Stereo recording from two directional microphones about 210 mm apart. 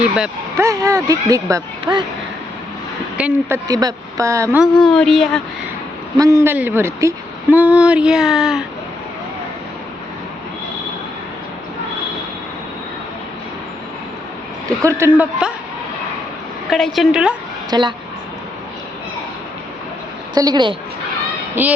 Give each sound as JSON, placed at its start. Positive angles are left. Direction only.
{"t": 0.5, "sound": "speech", "side_deg": -15}
{"t": 3.2, "sound": "speech", "side_deg": -5}
{"t": 3.7, "sound": "speech", "side_deg": -15}
{"t": 4.6, "sound": "a sound", "side_deg": 5}
{"t": 6.1, "sound": "speech", "side_deg": -15}
{"t": 7.5, "sound": "a sound", "side_deg": -5}
{"t": 14.8, "sound": "speech", "side_deg": -15}
{"t": 16.6, "sound": "a sound", "side_deg": 0}
{"t": 17.7, "sound": "a woman's voice", "side_deg": -20}
{"t": 20.3, "sound": "a woman's voice", "side_deg": -20}
{"t": 21.6, "sound": "speech", "side_deg": -10}